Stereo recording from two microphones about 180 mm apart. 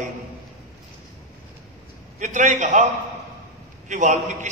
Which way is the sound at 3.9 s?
40° right (ahead or behind).